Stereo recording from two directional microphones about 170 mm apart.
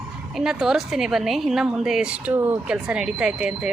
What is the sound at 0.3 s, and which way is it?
A woman's voice, centre (ahead or behind).